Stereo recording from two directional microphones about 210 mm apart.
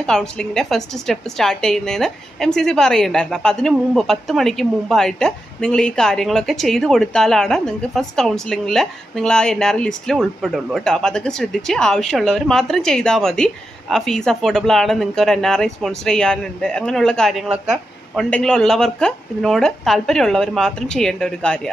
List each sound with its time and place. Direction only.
0.0 s a woman's voice: 5° left (ahead or behind)